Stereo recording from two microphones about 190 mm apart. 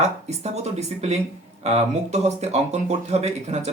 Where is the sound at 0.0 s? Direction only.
35° right (ahead or behind).